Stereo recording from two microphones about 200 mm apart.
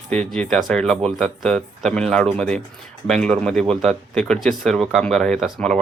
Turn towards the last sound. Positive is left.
turn(degrees=0)  # may be behind; listen again after turning